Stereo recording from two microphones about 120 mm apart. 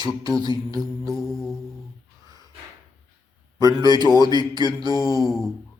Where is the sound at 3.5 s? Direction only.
35° right (ahead or behind).